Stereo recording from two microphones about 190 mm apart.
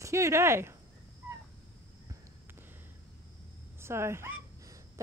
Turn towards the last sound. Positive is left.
turn(degrees=-15)  # may be behind; listen again after turning